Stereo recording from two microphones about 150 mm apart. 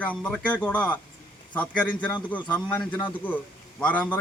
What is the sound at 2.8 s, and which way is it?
Speech, 30° left (ahead or behind).